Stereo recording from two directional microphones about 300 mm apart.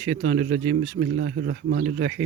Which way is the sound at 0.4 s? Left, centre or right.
Right.